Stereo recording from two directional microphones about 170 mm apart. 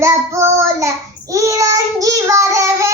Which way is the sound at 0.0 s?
15° right (ahead or behind).